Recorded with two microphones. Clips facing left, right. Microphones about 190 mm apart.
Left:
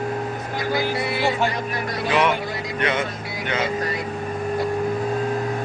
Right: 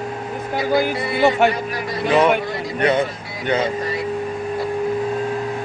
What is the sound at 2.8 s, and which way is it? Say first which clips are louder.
Speech: right 6 dB; 35° right (ahead or behind).